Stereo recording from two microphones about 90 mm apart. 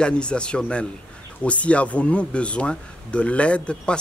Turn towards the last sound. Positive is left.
turn(degrees=15)  # may be behind; listen again after turning